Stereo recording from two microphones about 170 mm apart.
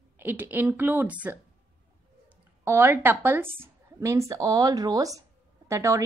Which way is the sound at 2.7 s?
10° right (ahead or behind).